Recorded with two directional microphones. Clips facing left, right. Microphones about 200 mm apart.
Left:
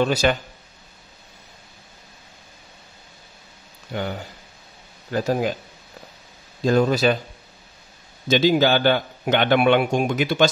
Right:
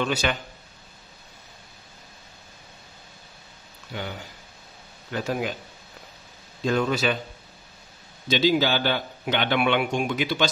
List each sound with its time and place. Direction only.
0.0 s speech: 40° left (ahead or behind)
3.9 s speech: 45° left (ahead or behind)
6.6 s speech: 40° left (ahead or behind)
8.3 s a man's voice: 50° left (ahead or behind)